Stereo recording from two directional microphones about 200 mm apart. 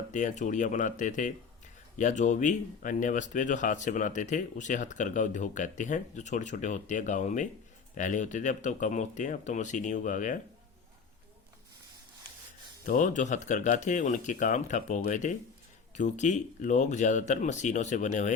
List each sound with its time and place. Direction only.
0.1 s speech: 40° left (ahead or behind)
12.8 s speech: 40° left (ahead or behind)